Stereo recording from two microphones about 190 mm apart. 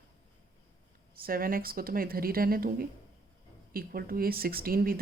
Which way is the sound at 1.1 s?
50° right (ahead or behind).